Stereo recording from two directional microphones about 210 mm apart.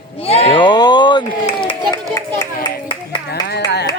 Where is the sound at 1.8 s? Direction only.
20° right (ahead or behind).